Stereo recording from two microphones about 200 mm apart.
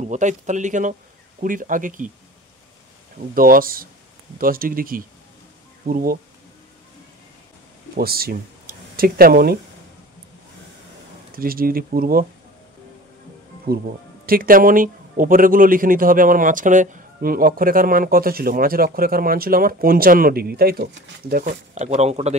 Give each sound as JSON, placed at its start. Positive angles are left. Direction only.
{"t": 0.0, "sound": "speech", "side_deg": -40}
{"t": 3.3, "sound": "speech", "side_deg": -45}
{"t": 7.9, "sound": "speech", "side_deg": -50}
{"t": 11.3, "sound": "speech", "side_deg": -45}
{"t": 13.7, "sound": "speech", "side_deg": -45}